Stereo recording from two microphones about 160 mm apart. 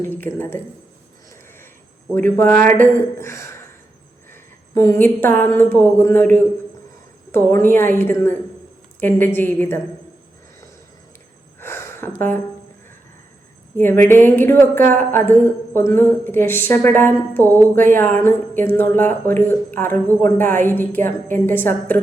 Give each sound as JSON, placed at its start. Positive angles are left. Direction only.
{"t": 0.0, "sound": "speech", "side_deg": 10}
{"t": 2.1, "sound": "a woman's voice", "side_deg": 10}
{"t": 11.6, "sound": "gasp", "side_deg": 15}
{"t": 13.7, "sound": "speech", "side_deg": 15}